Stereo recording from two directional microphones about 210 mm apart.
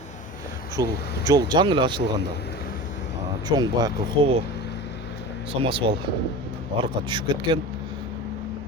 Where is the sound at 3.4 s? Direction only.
20° right (ahead or behind).